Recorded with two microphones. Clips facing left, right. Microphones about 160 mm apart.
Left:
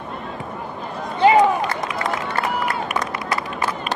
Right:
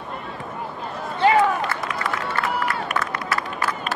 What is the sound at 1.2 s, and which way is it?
Run, 15° left (ahead or behind).